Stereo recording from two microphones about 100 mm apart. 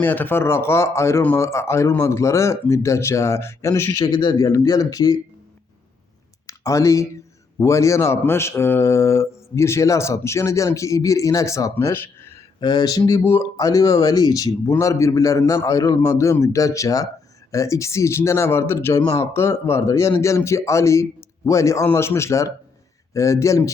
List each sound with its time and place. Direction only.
0.0 s speech: 20° left (ahead or behind)
3.9 s a man's voice: 60° left (ahead or behind)
4.2 s speech: 40° left (ahead or behind)
6.5 s speech: 30° left (ahead or behind)
12.5 s speech: 45° left (ahead or behind); by 23.7 s 30° left (ahead or behind)